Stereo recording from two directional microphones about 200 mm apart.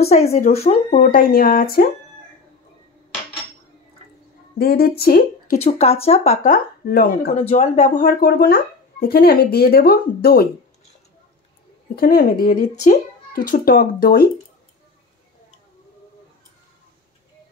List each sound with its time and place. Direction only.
0.0 s speech: 30° left (ahead or behind); by 1.9 s 50° left (ahead or behind)
4.6 s speech: 50° left (ahead or behind)
5.6 s speech: 30° left (ahead or behind)
6.5 s speech: 50° left (ahead or behind)
7.3 s speech: 35° left (ahead or behind); by 10.5 s 50° left (ahead or behind)
11.9 s speech: 50° left (ahead or behind)